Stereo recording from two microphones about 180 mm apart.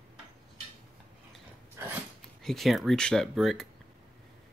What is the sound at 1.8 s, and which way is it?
Dog, 15° right (ahead or behind).